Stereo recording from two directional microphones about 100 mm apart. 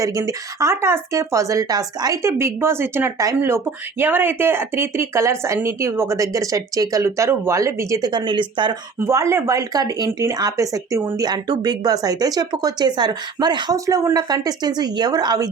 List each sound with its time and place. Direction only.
0.0 s speech: 35° right (ahead or behind)
2.4 s speech: 25° right (ahead or behind)
8.1 s speech: 50° right (ahead or behind)
9.0 s speech: 30° right (ahead or behind)
11.2 s speech: 45° right (ahead or behind)
13.7 s speech: 35° right (ahead or behind)